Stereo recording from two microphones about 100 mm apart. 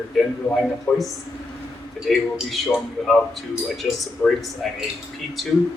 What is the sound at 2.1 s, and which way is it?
Speech, 5° right (ahead or behind).